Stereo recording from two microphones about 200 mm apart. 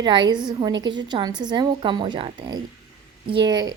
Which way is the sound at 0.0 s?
20° right (ahead or behind).